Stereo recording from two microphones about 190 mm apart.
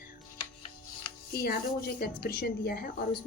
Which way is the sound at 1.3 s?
55° left (ahead or behind).